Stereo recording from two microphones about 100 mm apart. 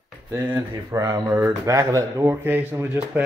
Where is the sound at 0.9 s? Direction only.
30° right (ahead or behind); by 3.2 s 15° right (ahead or behind).